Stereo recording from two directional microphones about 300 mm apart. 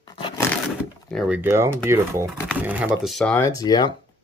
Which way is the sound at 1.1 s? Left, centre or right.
Centre.